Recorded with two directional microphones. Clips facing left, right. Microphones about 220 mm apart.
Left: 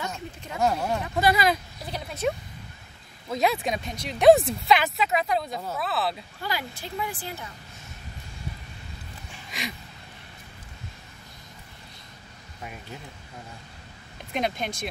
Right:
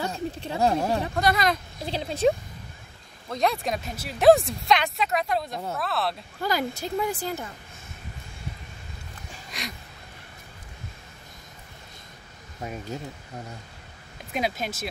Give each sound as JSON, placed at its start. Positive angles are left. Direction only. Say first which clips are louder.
{"t": 0.0, "sound": "speech", "louder": "right 5 dB", "side_deg": -30}
{"t": 1.1, "sound": "speech", "louder": "left 5 dB", "side_deg": 5}
{"t": 1.8, "sound": "speech", "louder": "right 6 dB", "side_deg": -30}
{"t": 3.3, "sound": "speech", "louder": "left 1 dB", "side_deg": 0}
{"t": 6.4, "sound": "speech", "louder": "right 6 dB", "side_deg": -45}
{"t": 9.5, "sound": "a sound", "louder": "left 2 dB", "side_deg": 0}
{"t": 12.9, "sound": "speech", "louder": "right 7 dB", "side_deg": -40}
{"t": 14.3, "sound": "speech", "louder": "even", "side_deg": -5}